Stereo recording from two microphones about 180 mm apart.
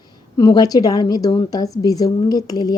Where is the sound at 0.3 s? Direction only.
20° left (ahead or behind).